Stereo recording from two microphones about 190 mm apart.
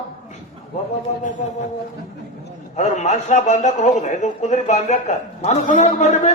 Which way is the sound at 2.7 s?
35° left (ahead or behind).